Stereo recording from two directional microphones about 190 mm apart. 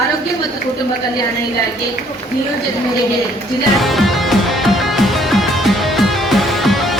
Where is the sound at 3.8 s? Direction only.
Centre (ahead or behind).